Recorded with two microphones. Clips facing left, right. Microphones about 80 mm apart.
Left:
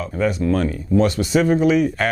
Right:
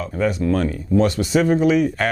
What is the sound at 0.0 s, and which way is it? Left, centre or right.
Speech, centre.